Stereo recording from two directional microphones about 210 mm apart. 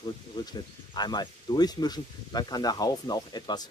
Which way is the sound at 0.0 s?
20° left (ahead or behind).